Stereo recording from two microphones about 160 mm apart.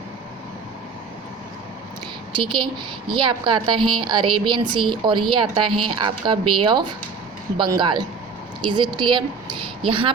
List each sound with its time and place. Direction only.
3.1 s a woman's voice: 30° right (ahead or behind)